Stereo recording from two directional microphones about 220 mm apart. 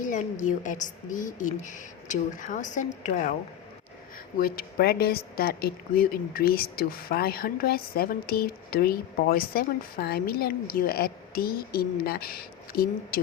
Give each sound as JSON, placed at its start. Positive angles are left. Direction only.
{"t": 0.0, "sound": "a woman's voice", "side_deg": 35}
{"t": 4.4, "sound": "speech", "side_deg": 45}